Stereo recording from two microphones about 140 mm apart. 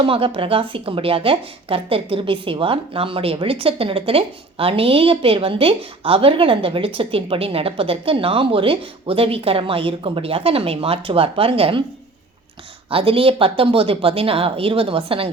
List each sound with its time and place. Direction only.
0.0 s speech: 40° right (ahead or behind)
12.9 s speech: 40° right (ahead or behind)